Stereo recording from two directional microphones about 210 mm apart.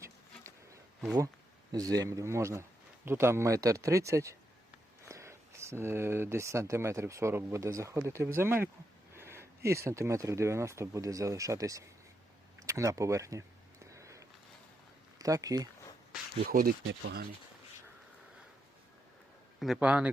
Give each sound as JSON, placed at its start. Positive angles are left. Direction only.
{"t": 1.7, "sound": "speech", "side_deg": -15}
{"t": 9.1, "sound": "a sound", "side_deg": -10}
{"t": 9.6, "sound": "speech", "side_deg": -15}
{"t": 13.9, "sound": "a sound", "side_deg": -15}
{"t": 15.2, "sound": "speech", "side_deg": -15}
{"t": 16.4, "sound": "speech", "side_deg": -45}
{"t": 16.8, "sound": "speech", "side_deg": -65}
{"t": 19.5, "sound": "speech", "side_deg": 0}